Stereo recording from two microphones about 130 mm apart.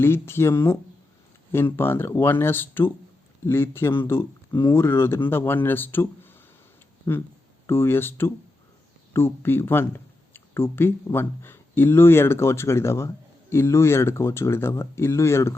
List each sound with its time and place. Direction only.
0.0 s speech: 20° left (ahead or behind)